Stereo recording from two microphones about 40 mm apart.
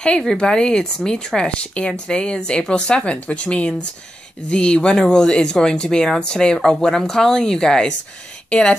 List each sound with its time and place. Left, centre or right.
0.4 s speech: left
8.5 s speech: left